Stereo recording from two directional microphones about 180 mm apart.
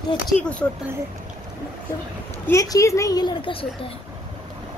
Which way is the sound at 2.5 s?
20° left (ahead or behind).